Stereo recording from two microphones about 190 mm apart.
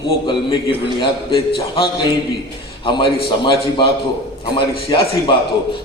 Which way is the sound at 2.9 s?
25° left (ahead or behind).